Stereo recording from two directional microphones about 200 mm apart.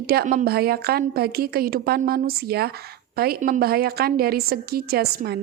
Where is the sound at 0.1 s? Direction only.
45° right (ahead or behind).